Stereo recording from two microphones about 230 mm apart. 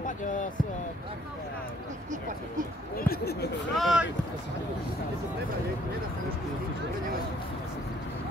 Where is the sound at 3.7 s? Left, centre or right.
Centre.